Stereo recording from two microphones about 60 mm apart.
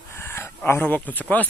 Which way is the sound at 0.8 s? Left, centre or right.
Left.